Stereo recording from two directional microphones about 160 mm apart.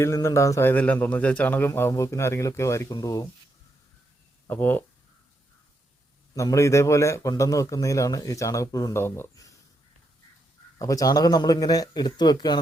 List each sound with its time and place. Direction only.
0.0 s speech: 20° left (ahead or behind)
4.4 s speech: 10° left (ahead or behind)
6.3 s a man's voice: 20° left (ahead or behind)
10.8 s a man's voice: 20° left (ahead or behind)